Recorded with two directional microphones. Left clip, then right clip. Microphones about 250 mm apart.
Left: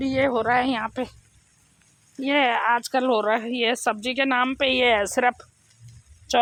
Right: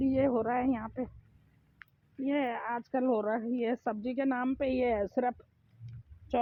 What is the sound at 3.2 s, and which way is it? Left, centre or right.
Speech, centre.